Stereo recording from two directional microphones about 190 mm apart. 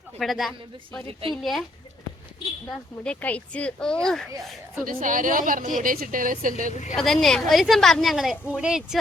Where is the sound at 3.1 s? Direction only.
5° left (ahead or behind).